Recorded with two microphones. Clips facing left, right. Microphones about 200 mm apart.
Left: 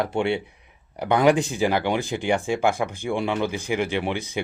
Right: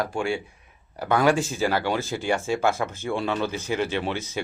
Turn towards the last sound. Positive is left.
turn(degrees=15)  # may be behind; listen again after turning